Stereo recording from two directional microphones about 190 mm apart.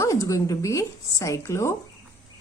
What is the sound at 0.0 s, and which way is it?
Speech, 15° left (ahead or behind).